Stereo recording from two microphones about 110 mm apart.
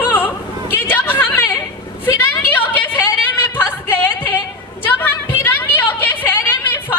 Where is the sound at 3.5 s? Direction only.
20° left (ahead or behind).